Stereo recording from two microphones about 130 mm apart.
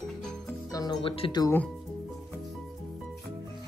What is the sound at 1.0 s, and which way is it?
Speech, 45° left (ahead or behind).